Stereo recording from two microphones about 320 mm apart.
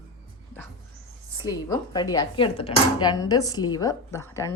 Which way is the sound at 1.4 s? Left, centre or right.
Centre.